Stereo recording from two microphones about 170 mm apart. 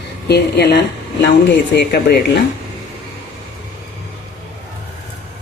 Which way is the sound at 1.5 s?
75° left (ahead or behind).